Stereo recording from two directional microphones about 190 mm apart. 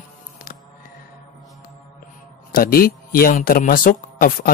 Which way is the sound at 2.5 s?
50° left (ahead or behind).